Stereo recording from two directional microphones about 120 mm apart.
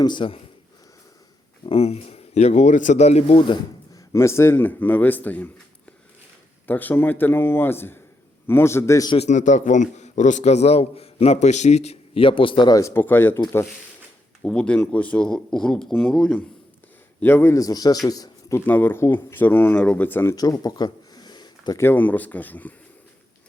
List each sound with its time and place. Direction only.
0.0 s speech: 40° left (ahead or behind)
1.6 s a man's voice: 60° left (ahead or behind)
3.9 s speech: 25° left (ahead or behind)
6.7 s a man's voice: 15° left (ahead or behind)
9.1 s a man's voice: 75° left (ahead or behind); by 12.8 s 40° left (ahead or behind)
12.8 s a man's voice: 20° left (ahead or behind)
14.4 s speech: 5° left (ahead or behind)
17.2 s a man's voice: 15° left (ahead or behind)
18.6 s speech: 15° left (ahead or behind)
20.3 s a sound: 30° left (ahead or behind)
21.8 s speech: 15° left (ahead or behind)